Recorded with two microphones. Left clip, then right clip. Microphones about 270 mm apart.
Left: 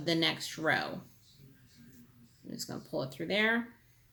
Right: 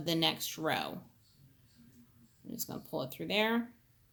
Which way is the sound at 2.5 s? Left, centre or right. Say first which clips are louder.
Left 2 dB; right.